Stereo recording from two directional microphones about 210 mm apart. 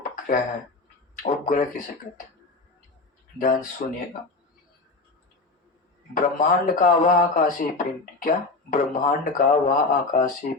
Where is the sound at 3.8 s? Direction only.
40° left (ahead or behind).